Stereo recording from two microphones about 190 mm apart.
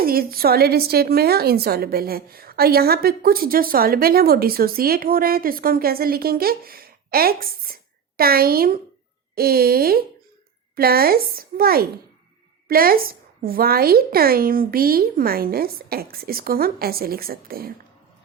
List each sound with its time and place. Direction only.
0.0 s a woman's voice: 50° right (ahead or behind)